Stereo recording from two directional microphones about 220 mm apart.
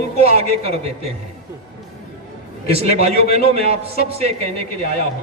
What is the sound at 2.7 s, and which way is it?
A man's voice, 25° right (ahead or behind).